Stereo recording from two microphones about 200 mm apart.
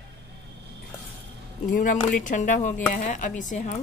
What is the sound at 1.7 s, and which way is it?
Speech, 40° left (ahead or behind).